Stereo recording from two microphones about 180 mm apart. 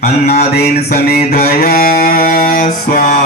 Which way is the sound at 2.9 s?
45° left (ahead or behind).